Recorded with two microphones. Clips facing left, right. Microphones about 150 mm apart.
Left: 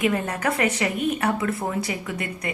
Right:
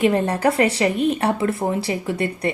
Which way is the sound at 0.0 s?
30° right (ahead or behind).